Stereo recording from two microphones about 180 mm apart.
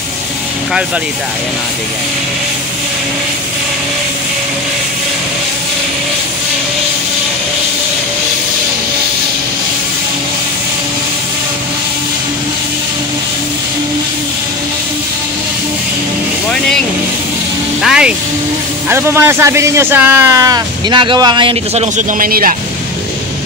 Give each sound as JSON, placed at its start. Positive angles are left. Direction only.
{"t": 17.8, "sound": "speech", "side_deg": -5}
{"t": 21.9, "sound": "a man's voice", "side_deg": -50}